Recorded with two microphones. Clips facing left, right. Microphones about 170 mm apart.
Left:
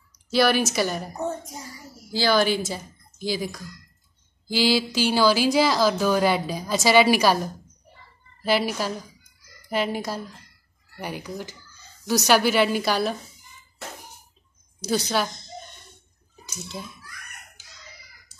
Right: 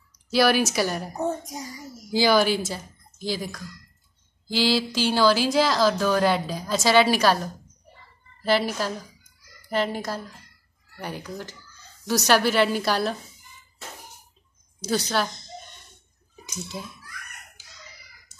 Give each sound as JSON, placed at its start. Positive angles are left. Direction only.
{"t": 0.3, "sound": "speech", "side_deg": -5}
{"t": 1.1, "sound": "a child's voice", "side_deg": -15}
{"t": 8.4, "sound": "a woman's voice", "side_deg": 10}
{"t": 14.8, "sound": "speech", "side_deg": 5}
{"t": 16.7, "sound": "speech", "side_deg": 0}
{"t": 18.3, "sound": "chicken", "side_deg": -20}